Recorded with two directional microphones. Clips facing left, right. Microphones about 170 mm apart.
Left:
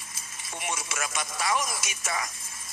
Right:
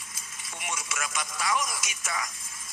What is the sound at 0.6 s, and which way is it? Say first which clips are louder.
Speech: left 2 dB; 30° left (ahead or behind).